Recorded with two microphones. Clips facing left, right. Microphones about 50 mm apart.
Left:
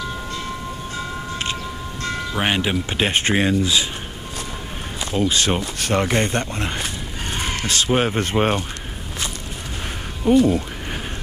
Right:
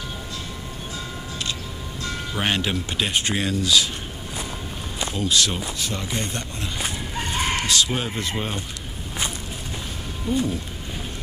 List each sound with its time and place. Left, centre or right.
2.3 s speech: centre
3.0 s speech: left
5.1 s speech: left
5.8 s speech: left
10.3 s speech: left